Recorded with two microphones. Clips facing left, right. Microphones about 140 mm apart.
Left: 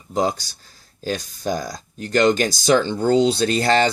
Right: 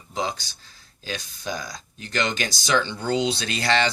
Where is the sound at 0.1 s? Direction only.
45° left (ahead or behind).